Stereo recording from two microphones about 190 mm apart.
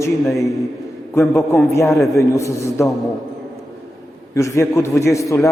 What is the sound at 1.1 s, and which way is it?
A man's voice, 15° left (ahead or behind).